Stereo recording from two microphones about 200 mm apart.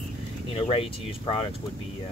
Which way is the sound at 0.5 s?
30° left (ahead or behind).